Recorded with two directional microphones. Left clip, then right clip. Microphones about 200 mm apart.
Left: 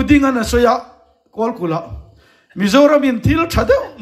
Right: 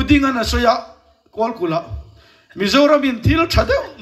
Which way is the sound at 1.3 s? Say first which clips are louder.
Even; 40° left (ahead or behind).